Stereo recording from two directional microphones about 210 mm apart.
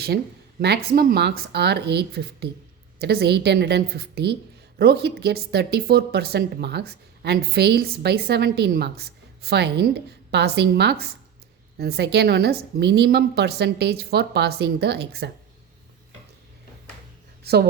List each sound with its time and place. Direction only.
0.6 s speech: 50° right (ahead or behind)
17.4 s a woman's voice: 50° right (ahead or behind)